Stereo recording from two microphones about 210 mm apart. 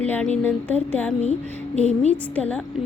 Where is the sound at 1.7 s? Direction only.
30° left (ahead or behind).